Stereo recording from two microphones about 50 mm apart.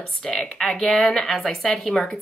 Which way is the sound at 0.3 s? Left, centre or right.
Centre.